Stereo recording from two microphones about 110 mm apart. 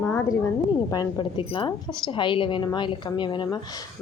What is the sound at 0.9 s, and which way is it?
Speech, 40° left (ahead or behind).